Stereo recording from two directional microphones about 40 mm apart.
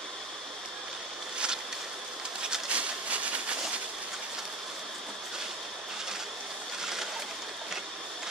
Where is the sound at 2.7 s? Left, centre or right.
Right.